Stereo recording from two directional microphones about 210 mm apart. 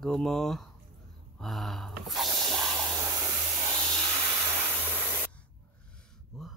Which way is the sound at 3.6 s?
20° right (ahead or behind).